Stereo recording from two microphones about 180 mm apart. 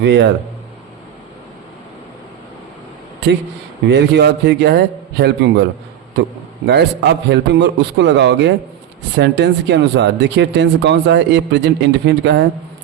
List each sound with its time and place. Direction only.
0.0 s speech: 75° right (ahead or behind)
3.8 s speech: 70° right (ahead or behind)
6.7 s speech: 70° right (ahead or behind)